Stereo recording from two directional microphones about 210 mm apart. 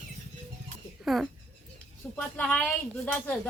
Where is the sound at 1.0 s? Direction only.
Centre (ahead or behind).